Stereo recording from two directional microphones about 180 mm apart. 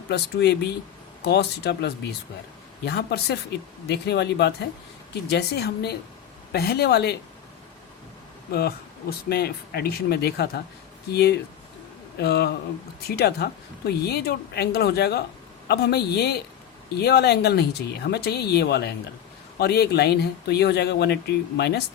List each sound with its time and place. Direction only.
0.1 s speech: 70° left (ahead or behind)
8.5 s speech: 60° left (ahead or behind)